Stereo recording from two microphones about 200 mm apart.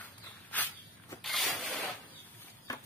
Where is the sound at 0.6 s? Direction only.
10° left (ahead or behind).